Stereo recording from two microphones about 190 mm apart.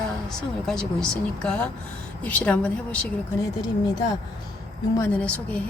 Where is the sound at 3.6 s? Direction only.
20° left (ahead or behind).